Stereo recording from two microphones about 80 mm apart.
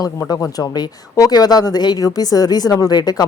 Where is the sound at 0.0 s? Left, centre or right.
Left.